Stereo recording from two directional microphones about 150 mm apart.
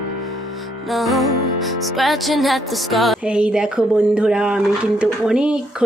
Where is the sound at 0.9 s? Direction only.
Centre (ahead or behind).